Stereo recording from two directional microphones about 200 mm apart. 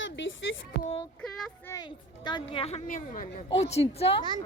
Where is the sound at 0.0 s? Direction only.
70° left (ahead or behind).